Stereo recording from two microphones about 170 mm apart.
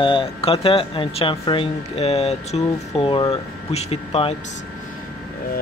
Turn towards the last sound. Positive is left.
turn(degrees=35)  # may be behind; listen again after turning